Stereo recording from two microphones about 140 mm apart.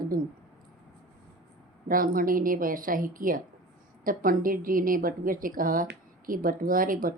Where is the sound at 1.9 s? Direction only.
90° right.